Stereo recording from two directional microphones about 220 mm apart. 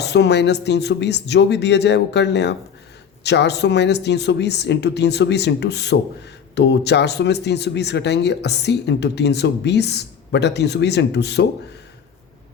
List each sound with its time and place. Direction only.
0.0 s speech: 50° left (ahead or behind)